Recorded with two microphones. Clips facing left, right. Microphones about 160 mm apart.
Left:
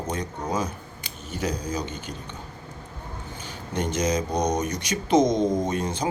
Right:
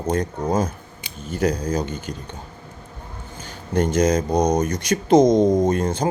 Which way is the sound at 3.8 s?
50° right (ahead or behind).